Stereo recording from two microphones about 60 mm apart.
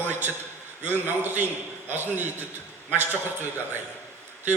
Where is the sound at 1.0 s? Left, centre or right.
Right.